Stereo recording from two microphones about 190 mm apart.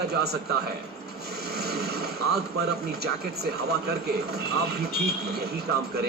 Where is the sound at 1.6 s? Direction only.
55° right (ahead or behind).